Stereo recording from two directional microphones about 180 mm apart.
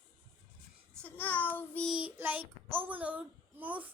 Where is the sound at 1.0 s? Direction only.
10° left (ahead or behind).